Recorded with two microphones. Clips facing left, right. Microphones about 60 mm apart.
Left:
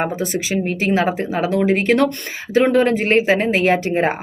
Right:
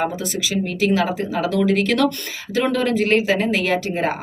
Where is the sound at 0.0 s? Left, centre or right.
Left.